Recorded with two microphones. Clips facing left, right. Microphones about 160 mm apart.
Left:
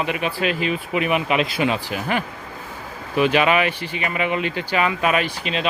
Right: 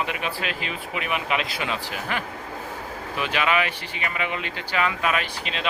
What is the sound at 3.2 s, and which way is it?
Speech, 15° left (ahead or behind).